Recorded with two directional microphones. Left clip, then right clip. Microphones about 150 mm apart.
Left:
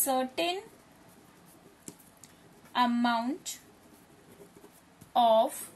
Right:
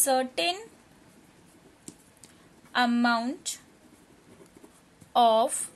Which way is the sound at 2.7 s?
60° right (ahead or behind).